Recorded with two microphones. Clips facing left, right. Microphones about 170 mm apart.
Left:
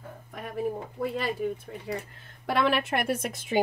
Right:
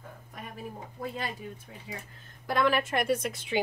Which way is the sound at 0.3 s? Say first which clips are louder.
Left 10 dB; 55° left (ahead or behind).